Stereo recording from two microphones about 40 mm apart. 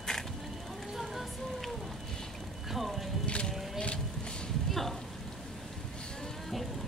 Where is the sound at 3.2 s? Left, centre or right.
Left.